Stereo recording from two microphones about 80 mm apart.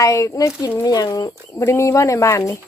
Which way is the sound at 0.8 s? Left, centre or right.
Left.